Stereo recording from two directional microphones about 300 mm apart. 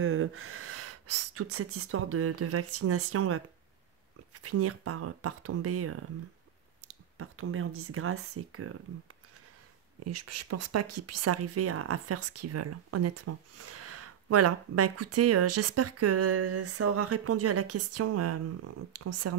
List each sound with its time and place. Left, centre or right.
0.0 s speech: right
7.2 s speech: right
10.0 s speech: right